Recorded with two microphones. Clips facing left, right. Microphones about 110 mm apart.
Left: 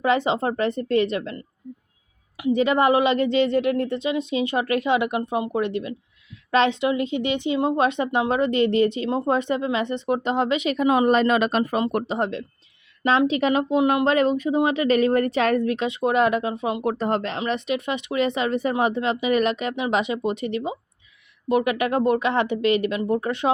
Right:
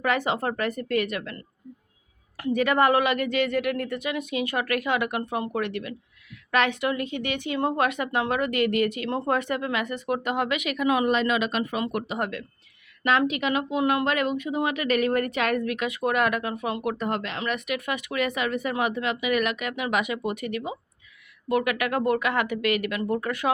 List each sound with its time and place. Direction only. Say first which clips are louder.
0.0 s a woman's voice: left 4 dB; 25° left (ahead or behind)
2.4 s a woman's voice: left 3 dB; 20° left (ahead or behind)
11.1 s a woman's voice: left 5 dB; 40° left (ahead or behind); by 16.9 s 20° left (ahead or behind)
16.9 s a woman's voice: left 5 dB; 30° left (ahead or behind)